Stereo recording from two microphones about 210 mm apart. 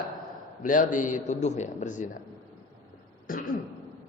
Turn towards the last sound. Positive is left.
turn(degrees=40)  # may be behind; listen again after turning